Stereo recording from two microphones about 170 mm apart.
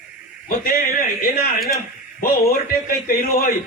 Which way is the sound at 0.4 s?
55° left (ahead or behind).